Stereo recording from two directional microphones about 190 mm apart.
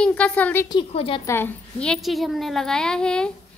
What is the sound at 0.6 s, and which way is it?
Speech, 25° left (ahead or behind).